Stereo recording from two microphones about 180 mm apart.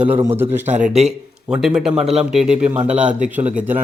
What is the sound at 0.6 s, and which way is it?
Speech, 40° right (ahead or behind).